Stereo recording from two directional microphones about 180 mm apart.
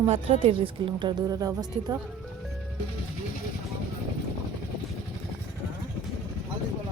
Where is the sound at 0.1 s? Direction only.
35° right (ahead or behind).